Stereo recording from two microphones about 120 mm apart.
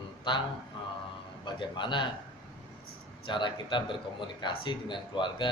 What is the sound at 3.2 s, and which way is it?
A man's voice, 40° left (ahead or behind).